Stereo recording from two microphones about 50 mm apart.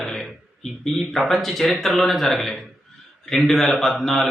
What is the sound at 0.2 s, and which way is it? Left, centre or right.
A man's voice, centre.